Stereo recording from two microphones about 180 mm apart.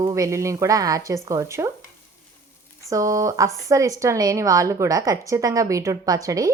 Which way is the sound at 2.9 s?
20° right (ahead or behind).